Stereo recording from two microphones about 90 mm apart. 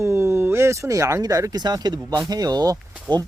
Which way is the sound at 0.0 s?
30° right (ahead or behind).